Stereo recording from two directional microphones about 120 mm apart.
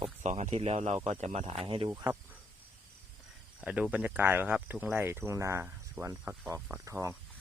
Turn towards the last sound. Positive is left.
turn(degrees=-25)  # may be behind; listen again after turning